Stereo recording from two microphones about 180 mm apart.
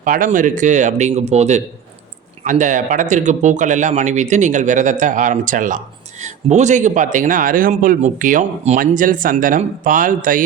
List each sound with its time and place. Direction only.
0.0 s speech: 50° right (ahead or behind)